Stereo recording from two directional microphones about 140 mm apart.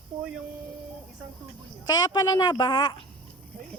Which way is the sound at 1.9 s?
30° left (ahead or behind).